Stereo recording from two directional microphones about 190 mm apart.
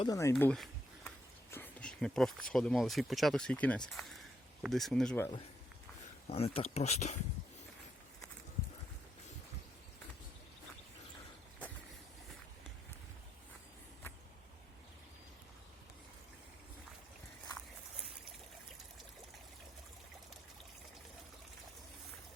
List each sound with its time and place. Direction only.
0.0 s speech: 15° left (ahead or behind)
6.2 s speech: 30° left (ahead or behind)